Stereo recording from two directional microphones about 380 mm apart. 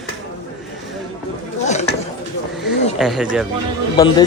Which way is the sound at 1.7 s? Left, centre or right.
Centre.